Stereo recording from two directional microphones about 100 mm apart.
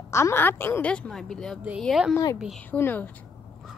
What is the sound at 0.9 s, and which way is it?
Speech, 10° left (ahead or behind).